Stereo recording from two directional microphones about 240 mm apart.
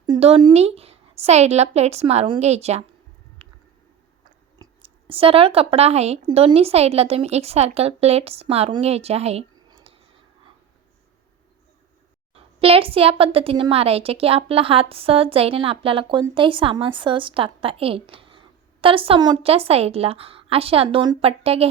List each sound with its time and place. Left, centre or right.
0.0 s a woman's voice: right
3.4 s a sound: right
4.5 s speech: centre
12.3 s a woman's voice: right